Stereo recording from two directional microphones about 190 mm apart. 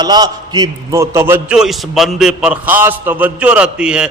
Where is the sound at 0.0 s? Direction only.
20° right (ahead or behind).